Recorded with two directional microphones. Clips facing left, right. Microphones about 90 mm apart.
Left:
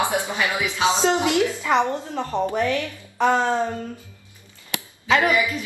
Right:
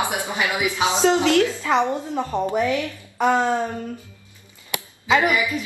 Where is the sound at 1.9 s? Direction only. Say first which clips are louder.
Right 2 dB; 15° right (ahead or behind).